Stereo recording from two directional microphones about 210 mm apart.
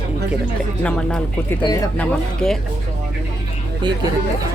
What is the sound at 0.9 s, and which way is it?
Speech, 5° left (ahead or behind).